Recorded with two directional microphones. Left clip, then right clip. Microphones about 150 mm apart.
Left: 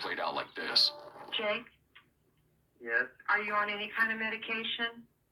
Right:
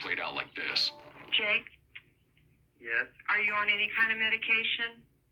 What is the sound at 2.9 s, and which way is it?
Speech, 35° left (ahead or behind).